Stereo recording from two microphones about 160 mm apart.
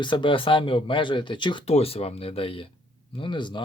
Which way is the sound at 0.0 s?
30° left (ahead or behind).